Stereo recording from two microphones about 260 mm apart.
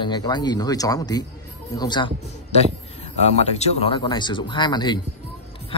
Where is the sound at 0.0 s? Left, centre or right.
Centre.